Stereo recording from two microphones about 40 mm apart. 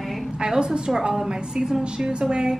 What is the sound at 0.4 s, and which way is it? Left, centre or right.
A woman's voice, centre.